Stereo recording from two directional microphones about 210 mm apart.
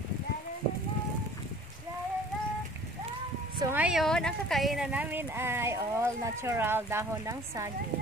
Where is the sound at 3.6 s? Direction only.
10° right (ahead or behind).